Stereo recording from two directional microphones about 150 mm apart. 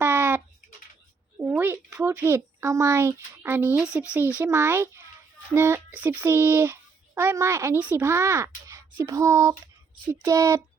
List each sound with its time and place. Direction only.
0.0 s a sound: 15° right (ahead or behind)
1.4 s speech: 15° right (ahead or behind)
4.4 s a child's voice: 15° right (ahead or behind)